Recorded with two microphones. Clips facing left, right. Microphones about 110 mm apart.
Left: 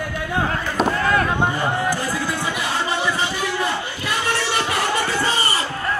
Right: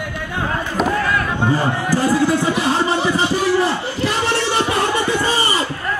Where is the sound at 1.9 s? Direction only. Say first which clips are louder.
Right 9 dB; 25° right (ahead or behind).